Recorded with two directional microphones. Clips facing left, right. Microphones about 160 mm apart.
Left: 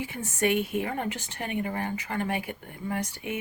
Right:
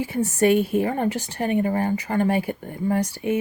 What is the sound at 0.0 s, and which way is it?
Speech, 35° right (ahead or behind).